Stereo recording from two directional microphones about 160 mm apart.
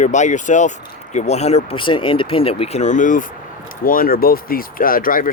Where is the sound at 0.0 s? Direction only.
50° left (ahead or behind).